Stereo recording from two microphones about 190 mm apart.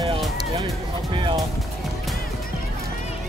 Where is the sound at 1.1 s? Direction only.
25° right (ahead or behind).